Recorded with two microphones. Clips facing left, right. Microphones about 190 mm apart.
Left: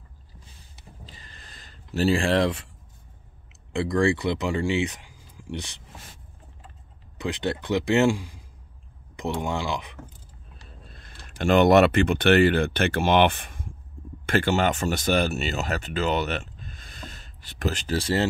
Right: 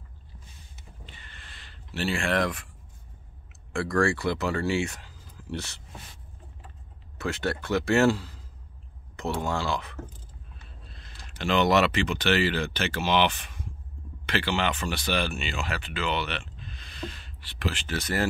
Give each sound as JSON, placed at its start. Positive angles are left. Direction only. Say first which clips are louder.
{"t": 1.0, "sound": "a sound", "louder": "left 1 dB", "side_deg": 35}
{"t": 3.7, "sound": "speech", "louder": "left 3 dB", "side_deg": 20}
{"t": 7.2, "sound": "speech", "louder": "left 2 dB", "side_deg": 15}
{"t": 10.9, "sound": "speech", "louder": "left 1 dB", "side_deg": 50}